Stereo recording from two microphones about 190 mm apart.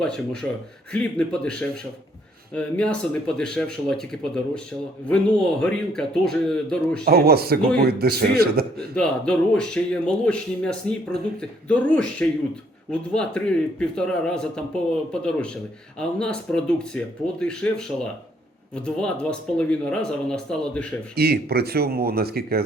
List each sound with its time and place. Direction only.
0.9 s speech: 5° left (ahead or behind)
7.0 s a man's voice: 55° right (ahead or behind)
9.0 s speech: 5° left (ahead or behind)
21.2 s speech: 55° right (ahead or behind)